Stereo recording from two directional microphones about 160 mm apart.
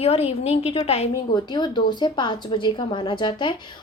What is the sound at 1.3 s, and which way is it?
A woman's voice, 30° left (ahead or behind).